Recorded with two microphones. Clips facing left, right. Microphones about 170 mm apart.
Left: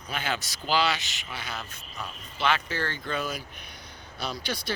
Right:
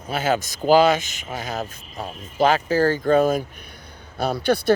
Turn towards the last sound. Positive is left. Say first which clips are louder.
# right 12 dB
turn(degrees=-55)  # may be behind; listen again after turning